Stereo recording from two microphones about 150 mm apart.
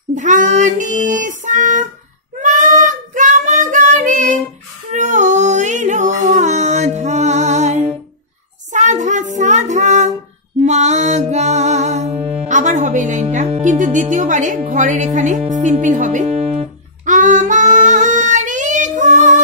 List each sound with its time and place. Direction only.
0.1 s child singing: 55° right (ahead or behind)
4.9 s a sound: 55° right (ahead or behind)
8.7 s child singing: 55° right (ahead or behind)
10.6 s music: 50° right (ahead or behind)
12.4 s music: 55° right (ahead or behind)
17.0 s child singing: 55° right (ahead or behind)